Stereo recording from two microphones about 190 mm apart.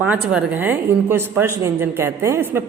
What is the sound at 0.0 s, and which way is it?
Speech, 5° right (ahead or behind).